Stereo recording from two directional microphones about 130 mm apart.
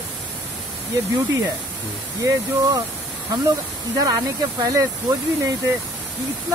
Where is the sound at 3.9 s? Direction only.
30° right (ahead or behind).